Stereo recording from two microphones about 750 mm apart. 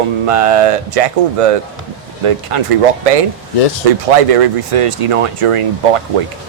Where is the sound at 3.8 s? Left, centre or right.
Right.